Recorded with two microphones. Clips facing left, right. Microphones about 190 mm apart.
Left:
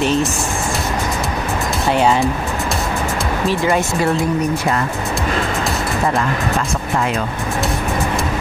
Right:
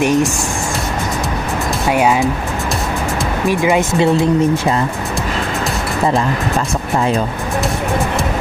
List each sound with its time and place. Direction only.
0.0 s speech: 15° right (ahead or behind)
1.9 s speech: 10° right (ahead or behind)
3.4 s speech: 15° right (ahead or behind)